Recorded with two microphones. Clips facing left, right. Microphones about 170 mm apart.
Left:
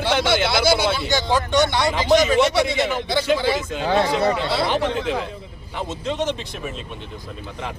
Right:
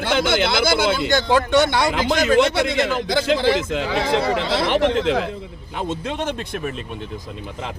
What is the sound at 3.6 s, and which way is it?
Speech, 90° right.